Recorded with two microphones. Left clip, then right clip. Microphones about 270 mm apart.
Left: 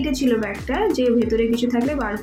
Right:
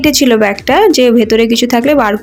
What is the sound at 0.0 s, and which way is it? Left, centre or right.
Speech, right.